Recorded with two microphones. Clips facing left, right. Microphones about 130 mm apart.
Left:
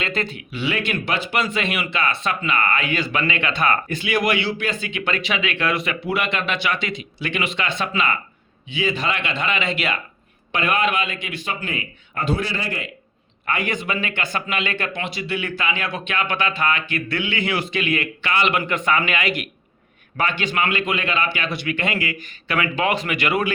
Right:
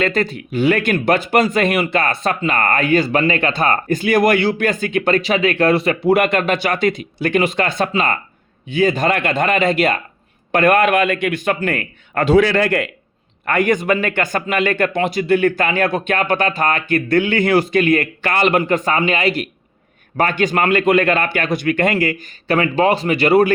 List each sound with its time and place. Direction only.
0.0 s a man's voice: 40° right (ahead or behind); by 12.9 s 65° right (ahead or behind)
13.4 s speech: 50° right (ahead or behind)